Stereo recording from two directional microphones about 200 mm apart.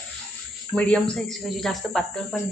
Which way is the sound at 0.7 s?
5° left (ahead or behind).